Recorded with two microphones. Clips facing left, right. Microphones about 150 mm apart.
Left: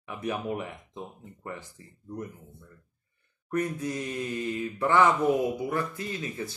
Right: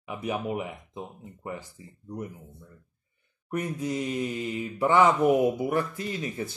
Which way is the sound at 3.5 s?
15° right (ahead or behind).